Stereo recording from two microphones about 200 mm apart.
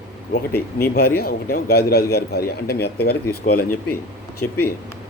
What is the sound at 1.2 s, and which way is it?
Speech, 50° left (ahead or behind).